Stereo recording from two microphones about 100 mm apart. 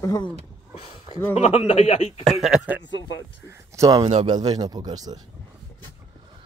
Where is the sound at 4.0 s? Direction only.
45° right (ahead or behind).